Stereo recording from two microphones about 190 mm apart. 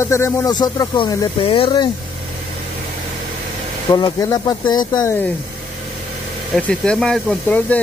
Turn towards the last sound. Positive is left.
turn(degrees=5)  # may be behind; listen again after turning